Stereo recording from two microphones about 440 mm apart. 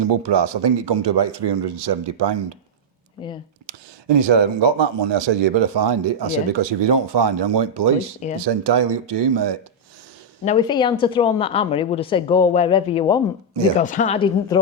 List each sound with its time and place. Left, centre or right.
0.0 s speech: right
3.7 s a man's voice: right
10.4 s speech: centre